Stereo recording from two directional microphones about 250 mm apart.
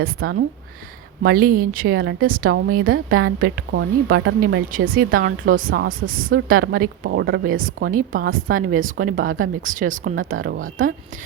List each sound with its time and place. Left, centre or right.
0.2 s a woman's voice: right
1.4 s speech: right
1.9 s a woman's voice: right
2.2 s speech: right
2.9 s a woman's voice: right
4.4 s speech: right
6.6 s a woman's voice: right
6.8 s speech: right